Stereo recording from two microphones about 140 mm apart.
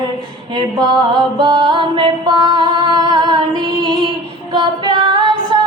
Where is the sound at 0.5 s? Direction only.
35° right (ahead or behind).